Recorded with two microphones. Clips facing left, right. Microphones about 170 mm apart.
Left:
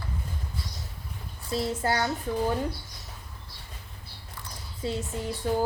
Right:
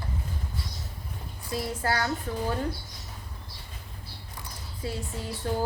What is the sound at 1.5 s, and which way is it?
Speech, 25° left (ahead or behind).